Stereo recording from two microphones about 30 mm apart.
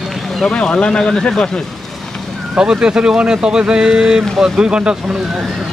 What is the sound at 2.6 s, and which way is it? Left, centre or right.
Speech, right.